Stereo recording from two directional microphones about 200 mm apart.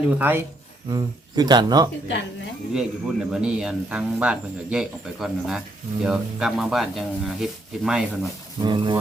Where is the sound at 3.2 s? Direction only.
5° right (ahead or behind).